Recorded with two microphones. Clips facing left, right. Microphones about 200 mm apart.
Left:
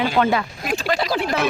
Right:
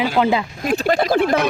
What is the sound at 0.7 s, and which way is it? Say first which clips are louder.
Speech: right 6 dB; 50° right (ahead or behind).